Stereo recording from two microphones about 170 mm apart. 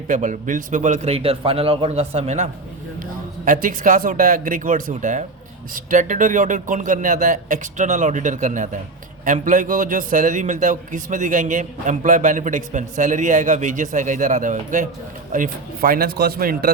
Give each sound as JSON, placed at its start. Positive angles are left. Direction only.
{"t": 0.1, "sound": "a man's voice", "side_deg": -50}